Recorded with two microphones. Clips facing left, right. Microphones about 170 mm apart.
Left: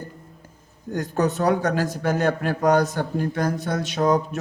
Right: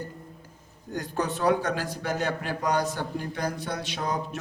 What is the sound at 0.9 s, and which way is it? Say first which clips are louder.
Speech: left 7 dB; 45° left (ahead or behind).